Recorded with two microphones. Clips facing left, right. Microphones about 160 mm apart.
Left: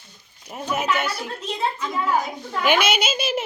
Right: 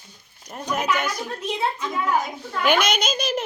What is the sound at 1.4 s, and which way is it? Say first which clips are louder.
Speech: right 1 dB; 10° right (ahead or behind).